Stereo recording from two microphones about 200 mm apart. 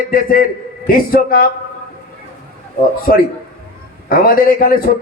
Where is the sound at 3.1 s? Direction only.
45° left (ahead or behind).